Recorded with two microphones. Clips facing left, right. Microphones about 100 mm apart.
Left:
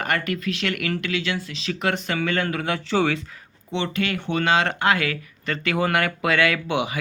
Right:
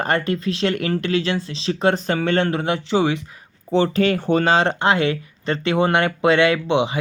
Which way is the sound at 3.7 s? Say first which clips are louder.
Right 8 dB; 35° right (ahead or behind).